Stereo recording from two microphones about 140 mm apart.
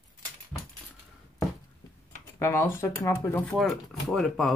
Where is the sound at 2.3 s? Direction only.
20° left (ahead or behind).